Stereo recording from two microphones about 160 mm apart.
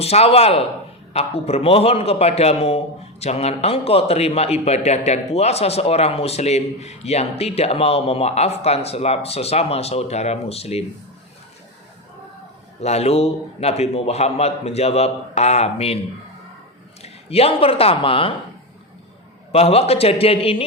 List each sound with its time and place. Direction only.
0.0 s a man's voice: 40° left (ahead or behind)
12.8 s a man's voice: 40° left (ahead or behind)
17.0 s speech: 40° left (ahead or behind)
19.5 s a man's voice: 40° left (ahead or behind)